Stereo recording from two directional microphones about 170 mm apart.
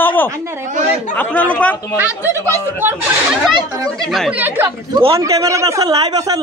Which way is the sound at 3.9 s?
5° left (ahead or behind).